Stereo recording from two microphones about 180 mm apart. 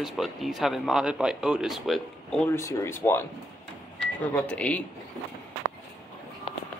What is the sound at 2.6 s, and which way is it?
Speech, 15° left (ahead or behind).